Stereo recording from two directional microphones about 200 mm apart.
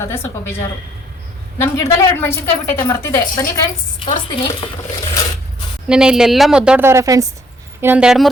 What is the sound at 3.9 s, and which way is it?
Speech, 25° left (ahead or behind).